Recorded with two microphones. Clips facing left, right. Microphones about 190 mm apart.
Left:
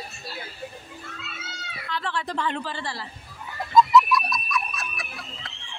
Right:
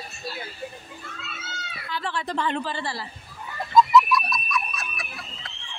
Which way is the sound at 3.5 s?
Centre (ahead or behind).